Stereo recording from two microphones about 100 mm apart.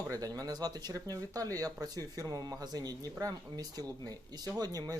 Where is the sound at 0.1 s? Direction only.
40° right (ahead or behind).